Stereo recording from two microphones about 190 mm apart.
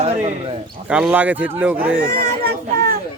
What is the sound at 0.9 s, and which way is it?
Speech, 5° right (ahead or behind).